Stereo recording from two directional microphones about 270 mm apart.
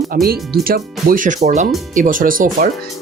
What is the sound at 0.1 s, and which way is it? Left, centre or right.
Speech, right.